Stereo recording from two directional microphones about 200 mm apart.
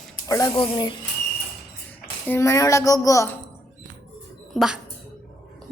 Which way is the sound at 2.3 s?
15° left (ahead or behind).